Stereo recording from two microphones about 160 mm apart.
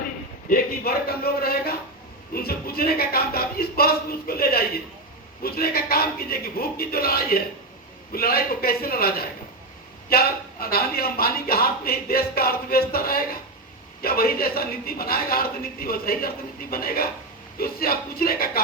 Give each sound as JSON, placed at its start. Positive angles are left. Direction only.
{"t": 0.5, "sound": "speech", "side_deg": 70}